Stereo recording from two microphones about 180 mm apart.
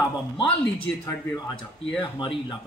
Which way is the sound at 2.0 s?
25° left (ahead or behind).